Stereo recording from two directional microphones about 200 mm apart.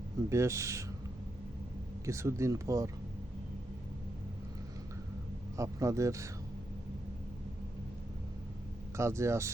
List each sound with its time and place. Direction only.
0.3 s speech: 15° right (ahead or behind)
2.0 s speech: 15° right (ahead or behind)
5.5 s speech: 15° right (ahead or behind)
9.0 s speech: 15° right (ahead or behind)